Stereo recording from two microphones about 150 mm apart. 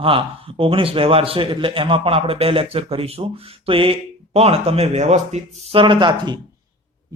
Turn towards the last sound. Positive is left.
turn(degrees=-30)  # may be behind; listen again after turning